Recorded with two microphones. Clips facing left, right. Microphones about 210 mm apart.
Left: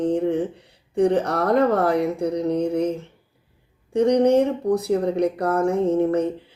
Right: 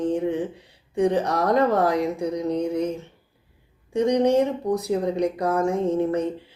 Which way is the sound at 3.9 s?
60° left (ahead or behind).